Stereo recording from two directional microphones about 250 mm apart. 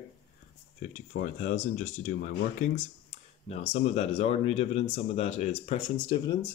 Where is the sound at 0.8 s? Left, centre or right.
Left.